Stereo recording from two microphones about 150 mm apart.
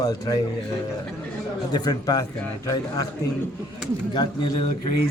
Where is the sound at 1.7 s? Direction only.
25° left (ahead or behind).